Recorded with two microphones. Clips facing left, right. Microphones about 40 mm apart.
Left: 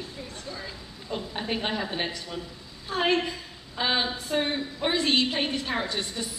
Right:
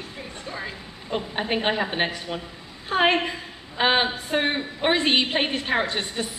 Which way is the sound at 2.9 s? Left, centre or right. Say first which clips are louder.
Right 4 dB; right.